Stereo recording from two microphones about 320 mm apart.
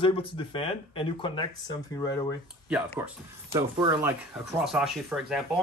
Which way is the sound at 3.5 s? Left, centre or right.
Centre.